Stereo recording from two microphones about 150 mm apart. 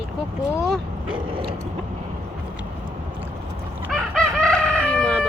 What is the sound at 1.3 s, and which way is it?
Mechanisms, 35° right (ahead or behind).